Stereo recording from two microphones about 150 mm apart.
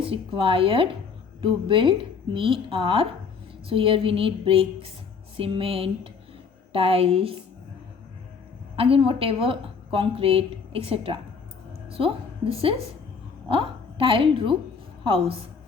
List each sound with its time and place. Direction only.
0.0 s a woman's voice: 35° right (ahead or behind)
8.7 s a woman's voice: 40° right (ahead or behind)